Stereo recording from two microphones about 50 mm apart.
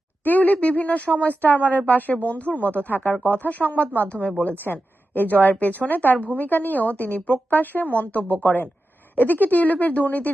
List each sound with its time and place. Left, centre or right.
0.3 s a woman's voice: left